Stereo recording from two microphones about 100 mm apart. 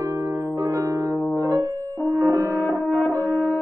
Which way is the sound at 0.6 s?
35° right (ahead or behind).